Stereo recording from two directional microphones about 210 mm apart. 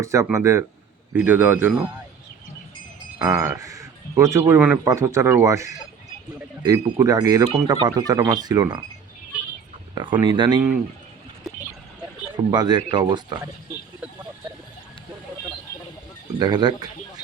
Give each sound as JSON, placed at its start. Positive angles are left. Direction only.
{"t": 0.0, "sound": "speech", "side_deg": -15}
{"t": 3.2, "sound": "speech", "side_deg": -15}
{"t": 9.9, "sound": "speech", "side_deg": -20}
{"t": 12.5, "sound": "speech", "side_deg": -20}
{"t": 16.4, "sound": "speech", "side_deg": -20}